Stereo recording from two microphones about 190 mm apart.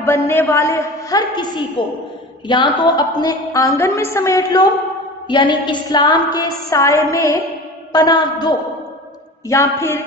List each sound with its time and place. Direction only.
0.0 s a woman's voice: 10° left (ahead or behind)
2.4 s music: 25° left (ahead or behind)
3.2 s a woman's voice: 20° left (ahead or behind)
5.3 s music: 25° left (ahead or behind)
9.5 s a woman's voice: 15° left (ahead or behind)